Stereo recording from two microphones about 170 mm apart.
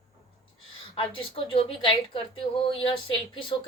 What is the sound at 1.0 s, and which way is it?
Speech, 30° left (ahead or behind).